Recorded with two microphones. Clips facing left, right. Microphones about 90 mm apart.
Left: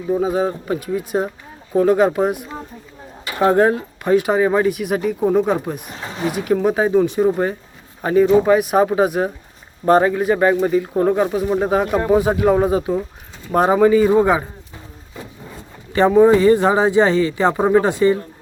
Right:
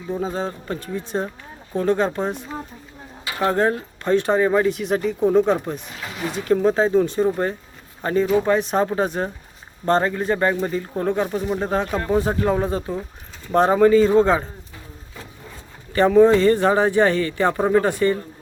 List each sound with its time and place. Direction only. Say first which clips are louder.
0.1 s speech: left 7 dB; 10° left (ahead or behind)
5.9 s speech: left 3 dB; 30° left (ahead or behind)
6.2 s speech: left 1 dB; 15° left (ahead or behind)
15.9 s speech: left 2 dB; 20° left (ahead or behind)